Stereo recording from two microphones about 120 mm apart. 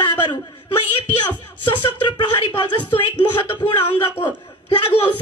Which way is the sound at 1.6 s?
40° left (ahead or behind).